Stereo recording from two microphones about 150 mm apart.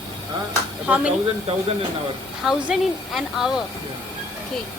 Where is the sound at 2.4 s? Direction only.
Centre (ahead or behind).